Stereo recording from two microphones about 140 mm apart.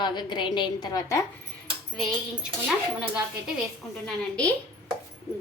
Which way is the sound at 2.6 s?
5° right (ahead or behind).